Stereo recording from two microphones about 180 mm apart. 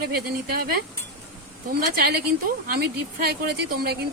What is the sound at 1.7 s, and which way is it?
A woman's voice, 60° right (ahead or behind).